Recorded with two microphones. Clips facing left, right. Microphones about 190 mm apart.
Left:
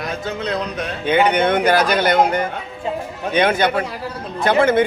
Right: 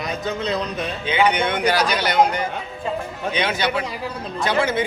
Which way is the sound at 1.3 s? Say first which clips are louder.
Left 5 dB; 55° left (ahead or behind).